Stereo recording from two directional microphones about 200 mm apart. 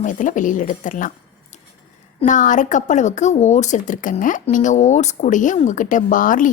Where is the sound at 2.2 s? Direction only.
40° left (ahead or behind).